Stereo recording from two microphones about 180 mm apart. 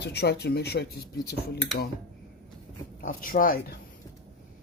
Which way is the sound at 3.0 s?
50° left (ahead or behind).